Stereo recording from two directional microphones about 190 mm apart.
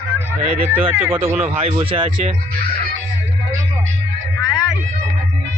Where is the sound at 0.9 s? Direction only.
10° right (ahead or behind).